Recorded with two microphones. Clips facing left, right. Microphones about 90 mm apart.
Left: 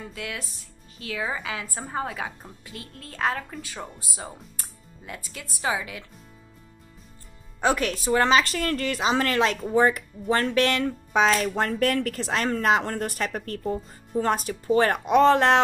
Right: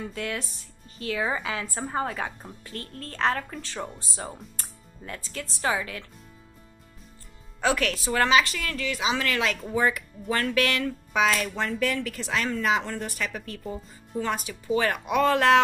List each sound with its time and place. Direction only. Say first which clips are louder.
0.1 s speech: right 3 dB; centre (ahead or behind)
7.6 s speech: left 2 dB; 25° left (ahead or behind)
8.3 s speech: left 2 dB; 40° left (ahead or behind)
11.4 s speech: left 4 dB; 45° left (ahead or behind); by 15.6 s 25° left (ahead or behind)